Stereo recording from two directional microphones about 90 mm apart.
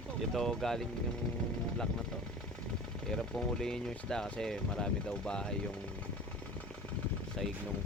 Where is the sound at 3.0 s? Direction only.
5° left (ahead or behind).